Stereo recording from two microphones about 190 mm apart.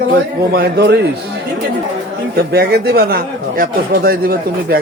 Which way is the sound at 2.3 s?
55° right (ahead or behind).